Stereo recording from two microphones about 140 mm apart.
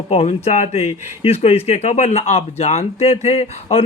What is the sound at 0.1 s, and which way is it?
A man's voice, 45° left (ahead or behind).